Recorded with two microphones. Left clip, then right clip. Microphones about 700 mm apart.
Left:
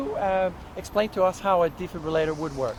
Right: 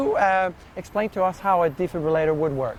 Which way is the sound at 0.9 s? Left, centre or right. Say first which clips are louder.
Even; right.